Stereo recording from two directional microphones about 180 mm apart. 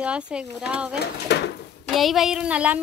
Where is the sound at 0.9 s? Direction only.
65° left (ahead or behind).